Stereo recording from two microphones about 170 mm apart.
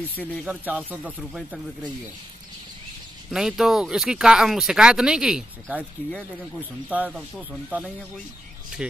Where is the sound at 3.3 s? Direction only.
5° right (ahead or behind).